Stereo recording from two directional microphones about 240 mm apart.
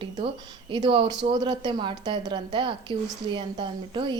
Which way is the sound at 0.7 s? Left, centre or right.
Right.